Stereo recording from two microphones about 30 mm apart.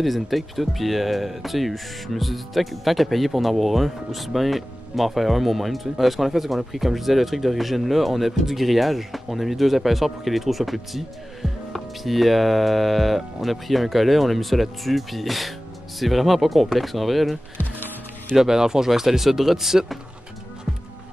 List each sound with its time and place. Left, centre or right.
0.0 s speech: centre
18.3 s speech: centre